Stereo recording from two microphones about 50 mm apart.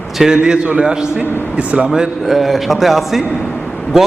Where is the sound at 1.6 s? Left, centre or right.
Right.